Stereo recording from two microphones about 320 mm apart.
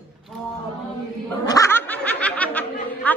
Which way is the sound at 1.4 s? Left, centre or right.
Centre.